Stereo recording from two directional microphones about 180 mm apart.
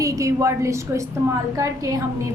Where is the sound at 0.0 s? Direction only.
15° right (ahead or behind).